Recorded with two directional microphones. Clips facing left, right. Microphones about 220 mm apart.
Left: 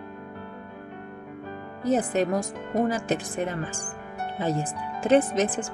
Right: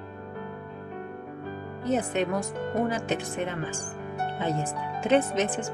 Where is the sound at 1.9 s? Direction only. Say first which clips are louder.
Left 3 dB; 40° left (ahead or behind).